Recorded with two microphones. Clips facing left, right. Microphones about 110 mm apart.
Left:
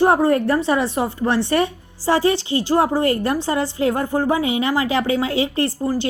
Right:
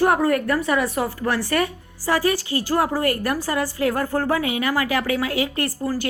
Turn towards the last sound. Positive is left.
turn(degrees=25)  # may be behind; listen again after turning